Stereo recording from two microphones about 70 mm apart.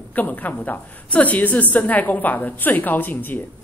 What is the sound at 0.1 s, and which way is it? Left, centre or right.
A woman's voice, left.